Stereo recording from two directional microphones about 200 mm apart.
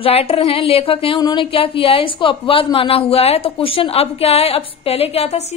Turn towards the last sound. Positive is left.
turn(degrees=30)  # may be behind; listen again after turning